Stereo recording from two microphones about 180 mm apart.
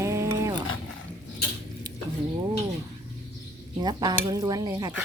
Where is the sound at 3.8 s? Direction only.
25° right (ahead or behind).